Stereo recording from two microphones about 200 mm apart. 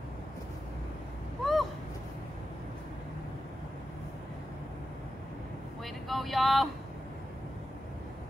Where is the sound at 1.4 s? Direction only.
Centre (ahead or behind).